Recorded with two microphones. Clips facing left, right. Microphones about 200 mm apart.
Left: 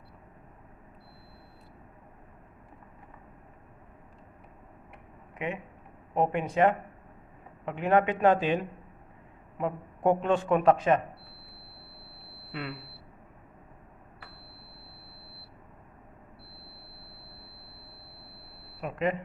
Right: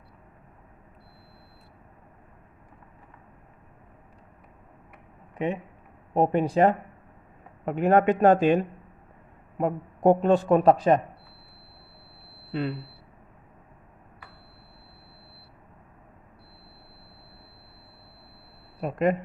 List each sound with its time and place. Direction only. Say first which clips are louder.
5.4 s a man's voice: right 6 dB; 35° right (ahead or behind)
12.5 s a sound: right 8 dB; 30° right (ahead or behind)
18.8 s a man's voice: right 5 dB; 40° right (ahead or behind)